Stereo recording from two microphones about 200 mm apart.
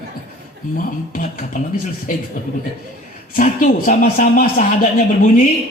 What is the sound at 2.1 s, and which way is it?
Speech, 45° left (ahead or behind).